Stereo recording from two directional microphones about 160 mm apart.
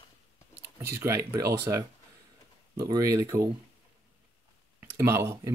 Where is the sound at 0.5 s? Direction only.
75° right (ahead or behind).